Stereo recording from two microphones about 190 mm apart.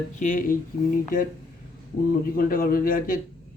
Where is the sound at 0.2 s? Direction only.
45° left (ahead or behind).